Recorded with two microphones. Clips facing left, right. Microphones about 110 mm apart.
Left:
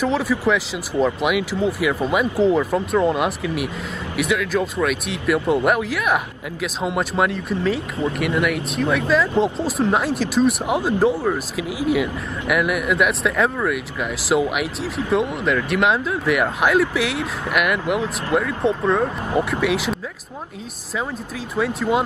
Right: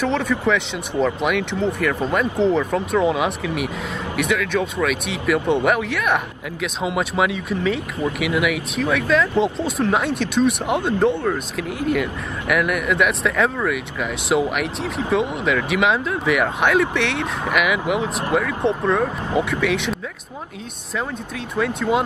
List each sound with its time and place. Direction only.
0.0 s speech: 5° left (ahead or behind)
21.5 s speech: centre (ahead or behind)